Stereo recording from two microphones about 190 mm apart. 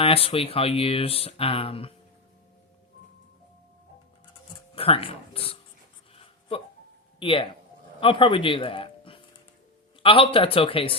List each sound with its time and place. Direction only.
0.0 s speech: 30° left (ahead or behind)
4.7 s speech: 30° left (ahead or behind)
7.2 s speech: 30° left (ahead or behind)